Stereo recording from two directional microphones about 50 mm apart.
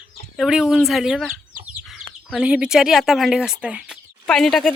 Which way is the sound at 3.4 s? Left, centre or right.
Centre.